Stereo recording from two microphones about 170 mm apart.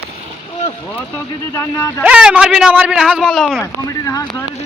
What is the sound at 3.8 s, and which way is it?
Speech, 20° left (ahead or behind).